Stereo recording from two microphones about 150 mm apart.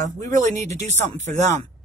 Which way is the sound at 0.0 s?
55° right (ahead or behind).